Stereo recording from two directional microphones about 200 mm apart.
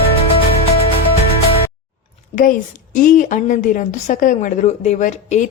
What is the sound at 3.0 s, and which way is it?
A woman's voice, 40° left (ahead or behind).